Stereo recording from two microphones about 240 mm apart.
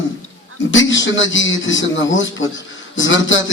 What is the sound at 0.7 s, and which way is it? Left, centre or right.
A man's voice, left.